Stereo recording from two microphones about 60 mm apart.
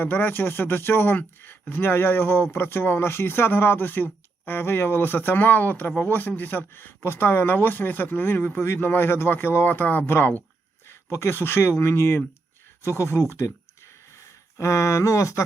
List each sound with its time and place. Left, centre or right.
0.0 s speech: left